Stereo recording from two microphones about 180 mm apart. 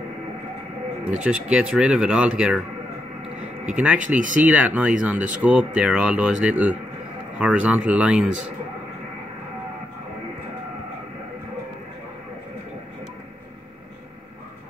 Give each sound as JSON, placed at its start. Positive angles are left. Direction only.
{"t": 1.1, "sound": "speech", "side_deg": -5}
{"t": 3.7, "sound": "speech", "side_deg": -5}
{"t": 4.0, "sound": "speech", "side_deg": -45}
{"t": 4.5, "sound": "speech", "side_deg": -10}